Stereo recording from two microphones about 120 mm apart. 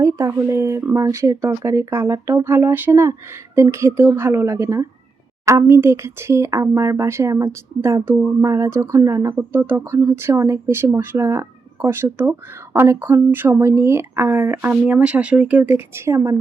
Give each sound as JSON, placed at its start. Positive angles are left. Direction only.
{"t": 0.0, "sound": "speech", "side_deg": -25}
{"t": 16.0, "sound": "speech", "side_deg": -25}